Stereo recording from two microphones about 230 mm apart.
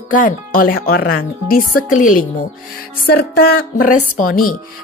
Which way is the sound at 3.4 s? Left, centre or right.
Left.